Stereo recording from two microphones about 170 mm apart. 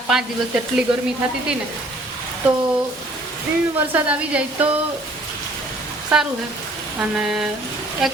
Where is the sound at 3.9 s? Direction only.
10° right (ahead or behind).